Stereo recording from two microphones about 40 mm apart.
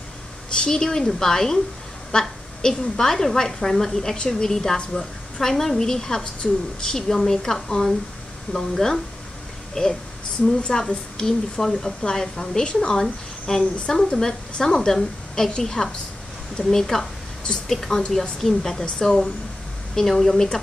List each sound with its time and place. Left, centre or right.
0.6 s a woman's voice: centre
17.7 s a woman's voice: centre